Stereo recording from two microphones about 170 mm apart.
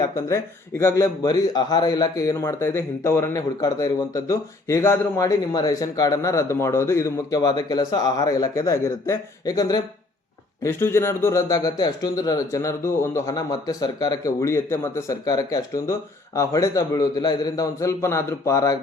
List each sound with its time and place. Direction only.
0.0 s speech: 15° left (ahead or behind)